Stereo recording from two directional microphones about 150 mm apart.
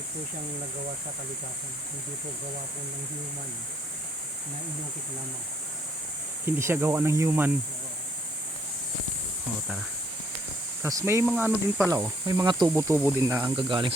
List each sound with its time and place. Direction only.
6.4 s speech: 15° right (ahead or behind)
10.8 s speech: 20° right (ahead or behind)
12.2 s speech: 30° right (ahead or behind)
12.6 s speech: 15° right (ahead or behind)
13.6 s speech: 35° right (ahead or behind)